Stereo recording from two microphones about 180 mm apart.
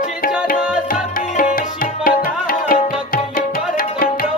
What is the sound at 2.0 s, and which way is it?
Music, 50° left (ahead or behind).